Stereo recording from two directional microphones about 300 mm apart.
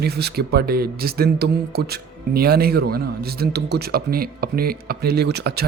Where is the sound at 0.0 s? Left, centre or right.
Right.